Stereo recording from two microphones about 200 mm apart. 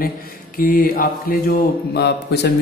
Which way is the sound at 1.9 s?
55° left (ahead or behind).